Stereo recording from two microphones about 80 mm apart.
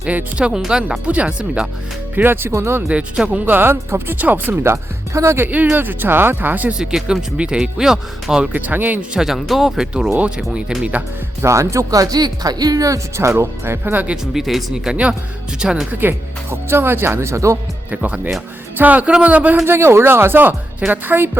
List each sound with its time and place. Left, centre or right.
0.0 s speech: centre
2.1 s speech: right
2.5 s speech: right
2.9 s speech: centre; by 5.5 s right
5.5 s speech: centre
6.7 s speech: centre
8.5 s speech: right
9.1 s speech: centre
11.4 s speech: right
14.3 s speech: centre
16.0 s speech: right
17.9 s speech: centre
19.6 s speech: right